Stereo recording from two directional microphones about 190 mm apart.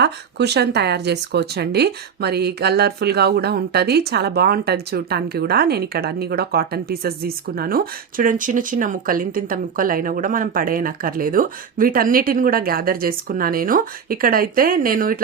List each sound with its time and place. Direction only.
0.0 s speech: 60° right (ahead or behind)